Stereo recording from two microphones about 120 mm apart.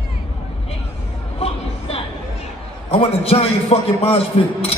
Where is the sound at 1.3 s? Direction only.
55° left (ahead or behind).